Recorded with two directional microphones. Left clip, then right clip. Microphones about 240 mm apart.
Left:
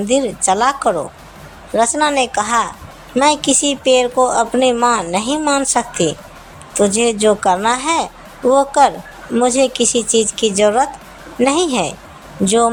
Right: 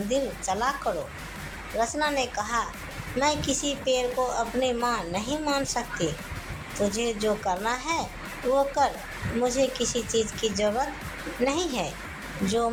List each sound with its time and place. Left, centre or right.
0.1 s a woman's voice: left